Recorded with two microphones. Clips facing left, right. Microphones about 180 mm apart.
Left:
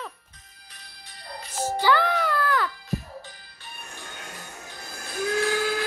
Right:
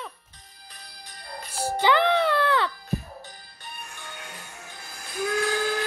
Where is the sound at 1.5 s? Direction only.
15° right (ahead or behind).